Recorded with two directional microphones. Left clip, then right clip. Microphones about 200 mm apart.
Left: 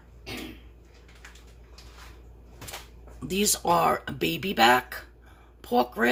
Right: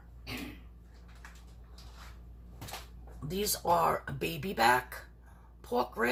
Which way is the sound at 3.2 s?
45° left (ahead or behind).